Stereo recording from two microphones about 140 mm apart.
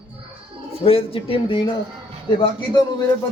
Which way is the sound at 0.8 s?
40° left (ahead or behind).